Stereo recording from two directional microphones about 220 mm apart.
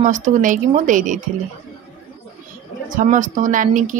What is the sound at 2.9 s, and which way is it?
Speech, 35° right (ahead or behind).